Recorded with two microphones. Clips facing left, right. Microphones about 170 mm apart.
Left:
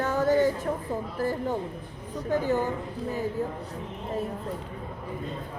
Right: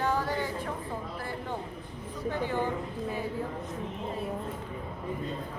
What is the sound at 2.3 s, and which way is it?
Speech, 45° left (ahead or behind).